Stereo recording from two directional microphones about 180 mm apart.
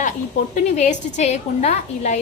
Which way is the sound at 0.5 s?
40° left (ahead or behind).